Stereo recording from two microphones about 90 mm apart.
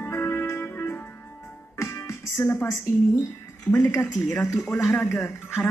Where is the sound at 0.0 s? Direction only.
25° left (ahead or behind).